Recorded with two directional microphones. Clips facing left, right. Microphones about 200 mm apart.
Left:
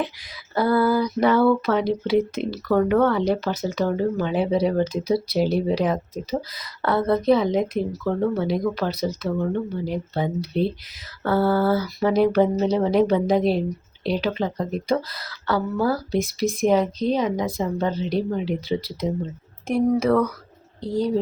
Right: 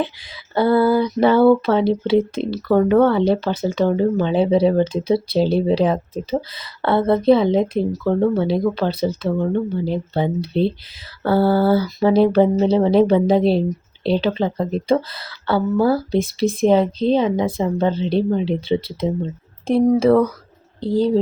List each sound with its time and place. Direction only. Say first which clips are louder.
0.0 s speech: right 4 dB; 30° right (ahead or behind)